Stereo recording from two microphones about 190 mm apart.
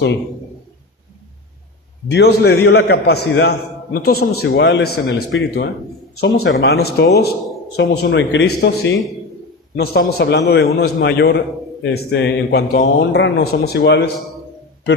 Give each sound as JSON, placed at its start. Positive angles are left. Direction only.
{"t": 2.0, "sound": "a man's voice", "side_deg": 60}
{"t": 6.1, "sound": "a man's voice", "side_deg": 60}
{"t": 7.8, "sound": "a man's voice", "side_deg": 70}